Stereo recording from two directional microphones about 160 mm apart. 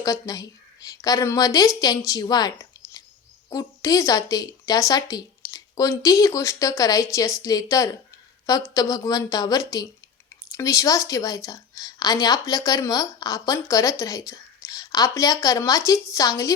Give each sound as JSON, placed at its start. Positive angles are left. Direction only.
{"t": 0.0, "sound": "a woman's voice", "side_deg": 20}
{"t": 3.5, "sound": "a woman's voice", "side_deg": 20}